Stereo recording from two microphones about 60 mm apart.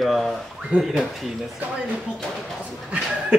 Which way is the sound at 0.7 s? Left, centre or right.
Right.